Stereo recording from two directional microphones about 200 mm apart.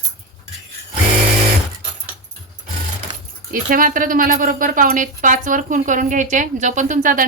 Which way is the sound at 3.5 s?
45° right (ahead or behind).